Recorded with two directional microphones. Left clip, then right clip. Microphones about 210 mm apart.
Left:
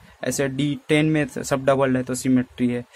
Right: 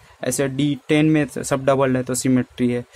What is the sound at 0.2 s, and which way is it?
Speech, 10° right (ahead or behind).